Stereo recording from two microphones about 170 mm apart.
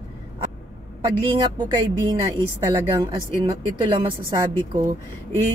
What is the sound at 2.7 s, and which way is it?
Speech, 25° right (ahead or behind).